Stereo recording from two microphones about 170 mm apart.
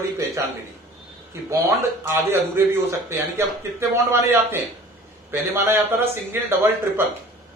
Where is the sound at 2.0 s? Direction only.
15° right (ahead or behind).